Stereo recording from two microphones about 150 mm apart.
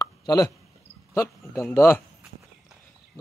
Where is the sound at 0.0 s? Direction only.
25° left (ahead or behind).